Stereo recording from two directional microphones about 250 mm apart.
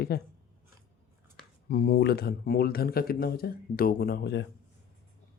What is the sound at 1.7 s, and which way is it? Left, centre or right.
Speech, left.